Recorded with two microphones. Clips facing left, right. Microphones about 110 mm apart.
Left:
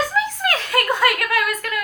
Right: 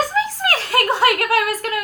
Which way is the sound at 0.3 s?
35° right (ahead or behind).